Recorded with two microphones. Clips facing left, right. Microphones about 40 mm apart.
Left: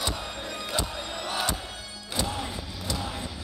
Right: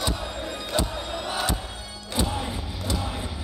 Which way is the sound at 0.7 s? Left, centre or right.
Centre.